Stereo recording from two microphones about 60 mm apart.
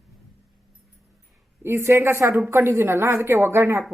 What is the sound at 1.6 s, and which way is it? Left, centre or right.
A woman's voice, right.